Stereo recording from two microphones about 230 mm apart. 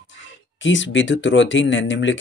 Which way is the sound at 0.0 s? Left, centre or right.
Left.